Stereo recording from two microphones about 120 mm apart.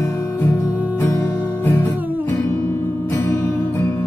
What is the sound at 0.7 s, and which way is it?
Music, 15° right (ahead or behind).